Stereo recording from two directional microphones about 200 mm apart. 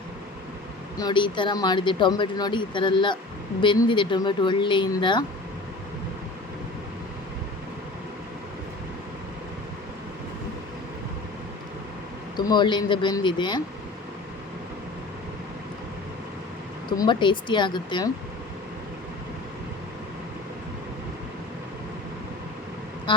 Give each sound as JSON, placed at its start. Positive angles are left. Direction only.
{"t": 0.9, "sound": "speech", "side_deg": 20}
{"t": 12.5, "sound": "speech", "side_deg": 20}
{"t": 17.0, "sound": "speech", "side_deg": 25}